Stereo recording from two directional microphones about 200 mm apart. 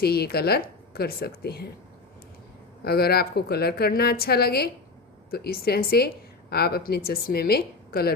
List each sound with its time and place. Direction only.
0.0 s a woman's voice: 50° left (ahead or behind)
2.8 s a woman's voice: 50° left (ahead or behind)